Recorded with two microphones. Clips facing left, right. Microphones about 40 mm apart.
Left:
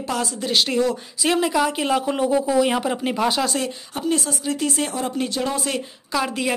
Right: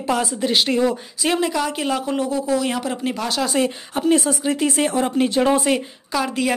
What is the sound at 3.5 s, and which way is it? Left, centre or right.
Speech, right.